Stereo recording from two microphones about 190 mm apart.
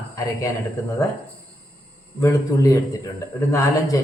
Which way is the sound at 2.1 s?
15° left (ahead or behind).